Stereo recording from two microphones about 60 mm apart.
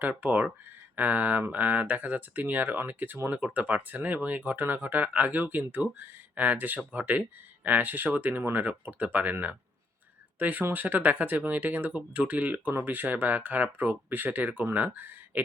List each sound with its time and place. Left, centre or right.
0.2 s speech: right